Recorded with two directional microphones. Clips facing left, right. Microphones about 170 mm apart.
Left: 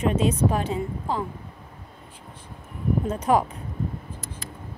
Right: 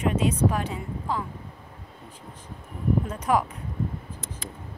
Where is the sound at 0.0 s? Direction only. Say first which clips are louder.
Left 1 dB; 25° left (ahead or behind).